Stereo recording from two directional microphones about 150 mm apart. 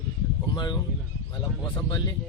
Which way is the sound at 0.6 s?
30° left (ahead or behind).